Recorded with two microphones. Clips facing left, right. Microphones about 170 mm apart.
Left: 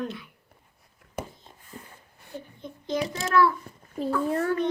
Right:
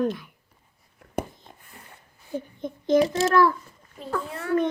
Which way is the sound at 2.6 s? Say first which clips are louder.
Right 9 dB; 50° right (ahead or behind).